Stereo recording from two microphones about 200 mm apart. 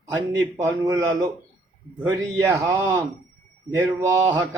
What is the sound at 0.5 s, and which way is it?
Speech, 15° right (ahead or behind).